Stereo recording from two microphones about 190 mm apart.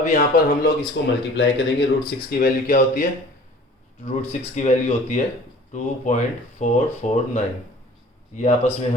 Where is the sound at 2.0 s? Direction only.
50° left (ahead or behind).